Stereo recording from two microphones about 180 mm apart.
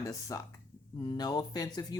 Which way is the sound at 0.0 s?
20° left (ahead or behind).